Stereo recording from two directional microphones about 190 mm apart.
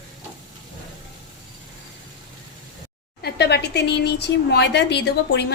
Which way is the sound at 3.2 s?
60° left (ahead or behind).